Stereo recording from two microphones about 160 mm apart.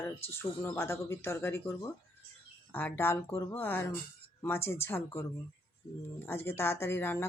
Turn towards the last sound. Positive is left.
turn(degrees=15)  # may be behind; listen again after turning